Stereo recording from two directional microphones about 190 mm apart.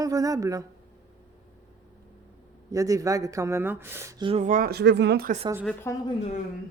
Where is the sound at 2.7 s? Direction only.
15° right (ahead or behind).